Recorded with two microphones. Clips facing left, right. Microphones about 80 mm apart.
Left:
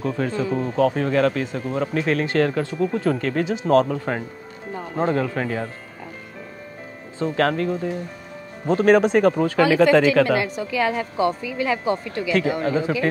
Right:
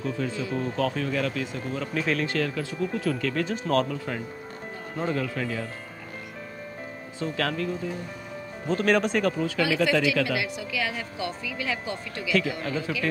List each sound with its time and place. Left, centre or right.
0.0 s speech: left
0.7 s speech: left
1.0 s speech: left
3.4 s speech: centre
3.7 s speech: left
7.2 s speech: left
8.7 s speech: left
9.4 s speech: left